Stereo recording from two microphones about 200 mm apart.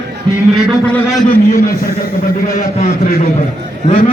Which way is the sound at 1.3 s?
45° left (ahead or behind).